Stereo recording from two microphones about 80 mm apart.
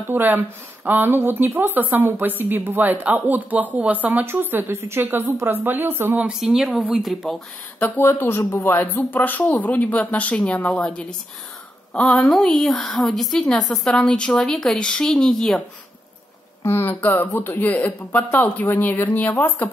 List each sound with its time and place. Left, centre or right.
0.1 s speech: right
6.4 s speech: centre
7.0 s speech: centre
7.8 s a woman's voice: left; by 15.6 s centre
16.6 s speech: left